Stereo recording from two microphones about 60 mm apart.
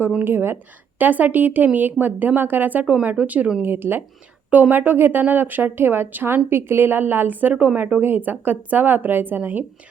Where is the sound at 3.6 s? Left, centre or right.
Right.